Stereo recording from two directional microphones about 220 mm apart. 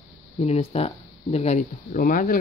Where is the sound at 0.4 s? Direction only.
30° left (ahead or behind).